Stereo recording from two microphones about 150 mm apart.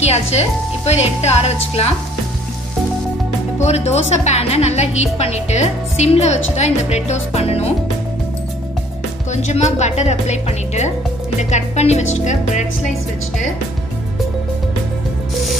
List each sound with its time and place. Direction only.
0.0 s speech: 45° left (ahead or behind)
3.5 s speech: 45° left (ahead or behind)
9.3 s speech: 50° left (ahead or behind)